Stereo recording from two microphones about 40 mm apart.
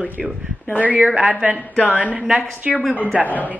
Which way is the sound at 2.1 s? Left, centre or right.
Right.